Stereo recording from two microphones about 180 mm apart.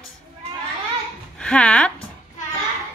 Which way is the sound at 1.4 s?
5° left (ahead or behind).